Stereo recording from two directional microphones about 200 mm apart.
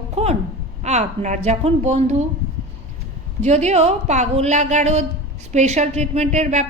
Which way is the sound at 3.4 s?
35° right (ahead or behind).